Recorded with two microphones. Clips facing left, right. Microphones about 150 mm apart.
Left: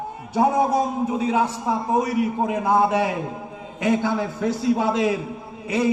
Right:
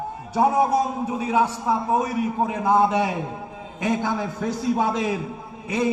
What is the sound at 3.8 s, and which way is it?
Speech, 15° right (ahead or behind).